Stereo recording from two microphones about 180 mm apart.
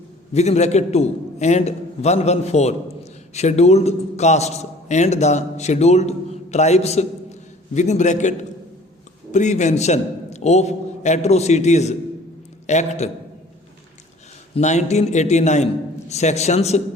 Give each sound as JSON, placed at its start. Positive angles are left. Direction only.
{"t": 0.3, "sound": "a man's voice", "side_deg": 35}
{"t": 14.5, "sound": "a man's voice", "side_deg": 40}